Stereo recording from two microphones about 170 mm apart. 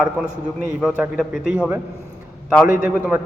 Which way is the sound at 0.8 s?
5° right (ahead or behind).